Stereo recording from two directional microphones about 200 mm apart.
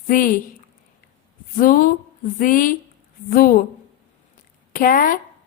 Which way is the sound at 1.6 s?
45° left (ahead or behind).